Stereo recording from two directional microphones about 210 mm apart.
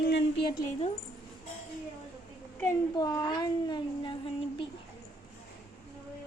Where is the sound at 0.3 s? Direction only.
25° left (ahead or behind).